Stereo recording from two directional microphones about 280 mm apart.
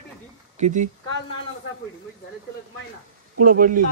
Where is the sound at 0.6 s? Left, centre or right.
Right.